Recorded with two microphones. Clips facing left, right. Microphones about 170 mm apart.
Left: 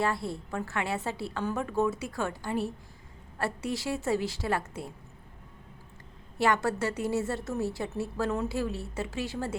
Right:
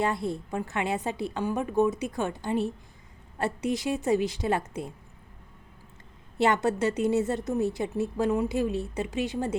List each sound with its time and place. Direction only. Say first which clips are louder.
0.0 s a woman's voice: right 2 dB; 20° right (ahead or behind)
6.4 s a woman's voice: right 3 dB; 20° right (ahead or behind)